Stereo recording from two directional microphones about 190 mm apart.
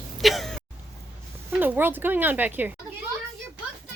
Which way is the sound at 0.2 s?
Centre (ahead or behind).